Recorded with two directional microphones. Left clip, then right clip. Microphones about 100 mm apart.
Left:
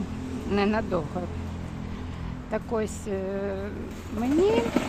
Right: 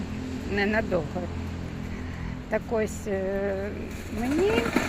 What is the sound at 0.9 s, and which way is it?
Speech, 15° left (ahead or behind).